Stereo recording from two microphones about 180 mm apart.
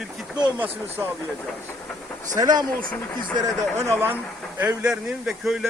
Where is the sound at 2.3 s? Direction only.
20° right (ahead or behind).